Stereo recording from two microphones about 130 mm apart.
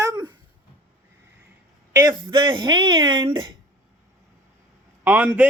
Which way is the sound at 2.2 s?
40° right (ahead or behind).